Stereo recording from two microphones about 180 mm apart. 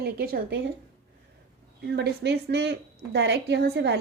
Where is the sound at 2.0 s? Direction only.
70° right (ahead or behind).